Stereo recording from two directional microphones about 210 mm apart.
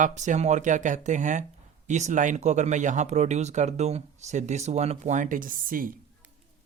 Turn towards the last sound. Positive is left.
turn(degrees=-40)  # may be behind; listen again after turning